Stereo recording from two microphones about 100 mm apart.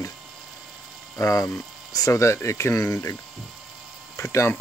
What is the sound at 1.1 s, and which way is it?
Speech, 30° left (ahead or behind).